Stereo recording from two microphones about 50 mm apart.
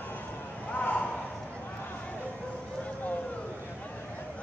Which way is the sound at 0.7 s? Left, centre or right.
Left.